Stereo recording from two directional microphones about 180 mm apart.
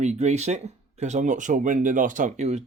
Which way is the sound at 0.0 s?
40° right (ahead or behind).